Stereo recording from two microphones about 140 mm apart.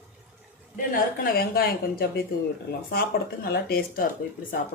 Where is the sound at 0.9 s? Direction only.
90° left.